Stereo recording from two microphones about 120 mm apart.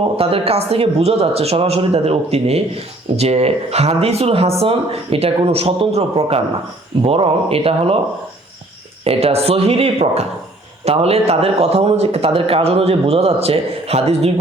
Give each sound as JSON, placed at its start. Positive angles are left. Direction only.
{"t": 0.2, "sound": "speech", "side_deg": -50}
{"t": 9.0, "sound": "speech", "side_deg": -55}